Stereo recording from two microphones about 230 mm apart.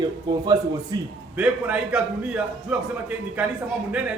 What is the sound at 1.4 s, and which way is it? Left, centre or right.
A man's voice, centre.